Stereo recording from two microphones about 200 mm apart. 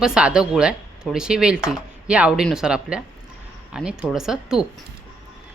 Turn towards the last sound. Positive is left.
turn(degrees=-5)  # may be behind; listen again after turning